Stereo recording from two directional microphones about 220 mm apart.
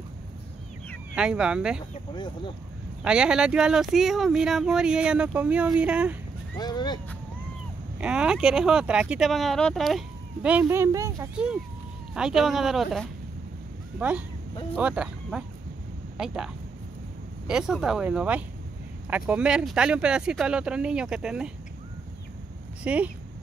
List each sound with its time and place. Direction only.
1.1 s speech: 5° right (ahead or behind)
2.1 s speech: 20° left (ahead or behind)
3.0 s speech: 5° right (ahead or behind)
6.6 s speech: 20° left (ahead or behind)
8.0 s speech: 5° right (ahead or behind)
11.3 s speech: 5° right (ahead or behind)
17.5 s speech: 5° right (ahead or behind)
22.8 s speech: 5° right (ahead or behind)